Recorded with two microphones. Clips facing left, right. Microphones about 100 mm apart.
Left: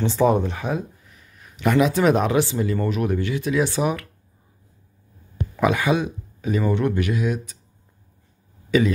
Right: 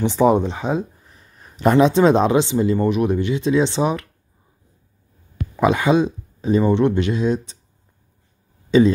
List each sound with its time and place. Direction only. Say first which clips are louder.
0.0 s speech: right 3 dB; 20° right (ahead or behind)
1.0 s speech: right 2 dB; 35° right (ahead or behind)
5.6 s speech: right 4 dB; 25° right (ahead or behind)
8.6 s a sound: right 5 dB; 25° right (ahead or behind)